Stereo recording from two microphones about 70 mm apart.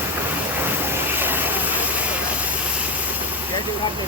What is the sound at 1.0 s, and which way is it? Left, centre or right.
Vehicle, right.